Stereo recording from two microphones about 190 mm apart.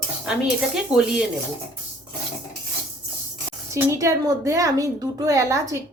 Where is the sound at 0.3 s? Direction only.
5° right (ahead or behind).